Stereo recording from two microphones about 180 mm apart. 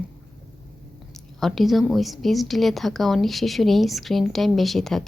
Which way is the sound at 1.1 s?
Centre (ahead or behind).